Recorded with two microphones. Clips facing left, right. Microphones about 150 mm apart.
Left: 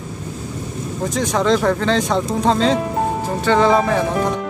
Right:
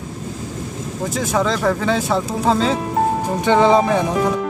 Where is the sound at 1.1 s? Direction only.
5° right (ahead or behind).